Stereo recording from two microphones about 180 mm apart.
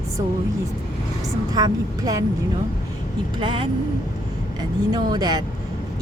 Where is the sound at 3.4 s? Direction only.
25° right (ahead or behind).